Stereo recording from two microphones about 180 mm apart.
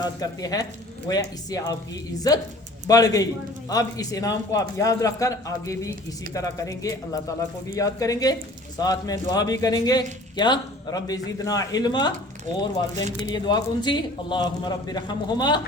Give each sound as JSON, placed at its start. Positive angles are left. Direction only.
{"t": 0.0, "sound": "a man's voice", "side_deg": 20}
{"t": 13.2, "sound": "a man's voice", "side_deg": 25}